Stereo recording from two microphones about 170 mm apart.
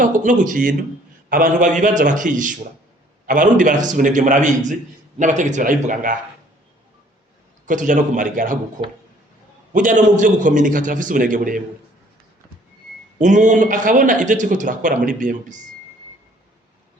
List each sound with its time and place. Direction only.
0.0 s a man's voice: 50° right (ahead or behind)
7.7 s a man's voice: 50° right (ahead or behind)
13.1 s a man's voice: 45° right (ahead or behind)